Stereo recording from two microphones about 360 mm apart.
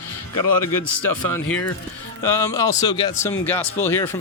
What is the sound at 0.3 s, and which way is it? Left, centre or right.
Speech, left.